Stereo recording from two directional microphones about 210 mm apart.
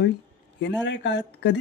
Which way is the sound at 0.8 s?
60° left (ahead or behind).